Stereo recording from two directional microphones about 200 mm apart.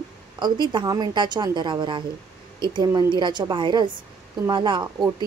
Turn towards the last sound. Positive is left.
turn(degrees=-25)  # may be behind; listen again after turning